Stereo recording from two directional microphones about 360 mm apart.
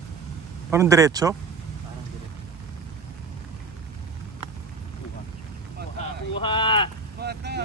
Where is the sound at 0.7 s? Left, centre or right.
Centre.